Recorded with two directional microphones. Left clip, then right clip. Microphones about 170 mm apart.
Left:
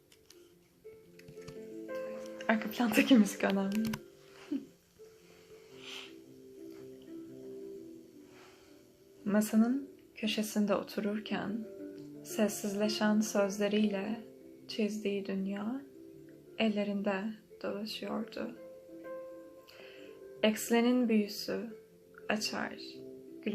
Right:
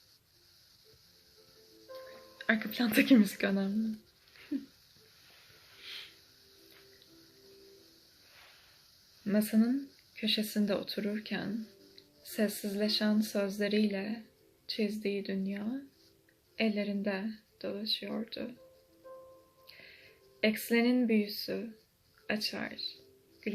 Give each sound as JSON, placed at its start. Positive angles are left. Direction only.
{"t": 2.5, "sound": "speech", "side_deg": -25}
{"t": 5.8, "sound": "music", "side_deg": -30}
{"t": 9.2, "sound": "speech", "side_deg": -20}
{"t": 20.4, "sound": "speech", "side_deg": -20}